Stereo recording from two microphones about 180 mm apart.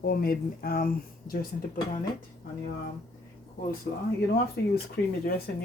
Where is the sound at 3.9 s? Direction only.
60° left (ahead or behind).